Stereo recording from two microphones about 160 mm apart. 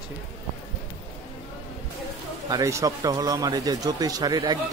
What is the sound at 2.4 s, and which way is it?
Speech, 20° right (ahead or behind).